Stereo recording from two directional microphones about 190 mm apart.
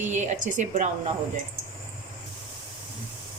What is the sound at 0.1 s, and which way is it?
Speech, 40° right (ahead or behind).